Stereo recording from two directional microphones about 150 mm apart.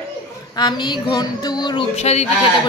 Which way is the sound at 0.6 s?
30° left (ahead or behind).